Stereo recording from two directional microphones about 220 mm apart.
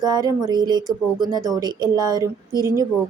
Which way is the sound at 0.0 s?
15° right (ahead or behind).